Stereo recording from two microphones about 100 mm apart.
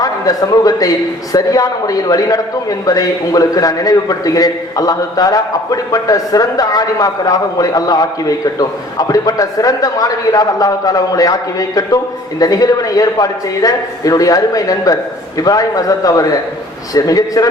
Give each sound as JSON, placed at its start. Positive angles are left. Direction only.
{"t": 0.0, "sound": "a man's voice", "side_deg": 40}